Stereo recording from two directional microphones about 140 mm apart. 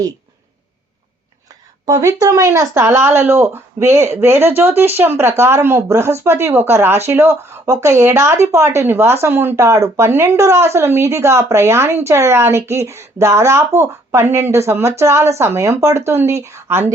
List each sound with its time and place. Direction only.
1.9 s a woman's voice: 25° right (ahead or behind)